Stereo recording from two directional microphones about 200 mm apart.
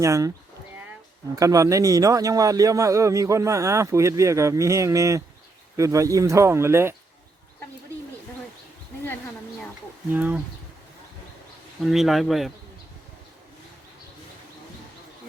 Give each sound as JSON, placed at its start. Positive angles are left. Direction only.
{"t": 0.0, "sound": "a man's voice", "side_deg": -15}
{"t": 1.4, "sound": "a man's voice", "side_deg": -15}
{"t": 10.1, "sound": "a man's voice", "side_deg": -10}
{"t": 11.8, "sound": "speech", "side_deg": 0}